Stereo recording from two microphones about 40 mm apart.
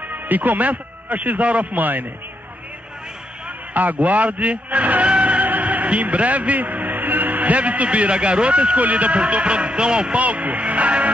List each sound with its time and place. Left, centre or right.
0.1 s a man's voice: right
3.7 s a man's voice: right
10.1 s a man's voice: right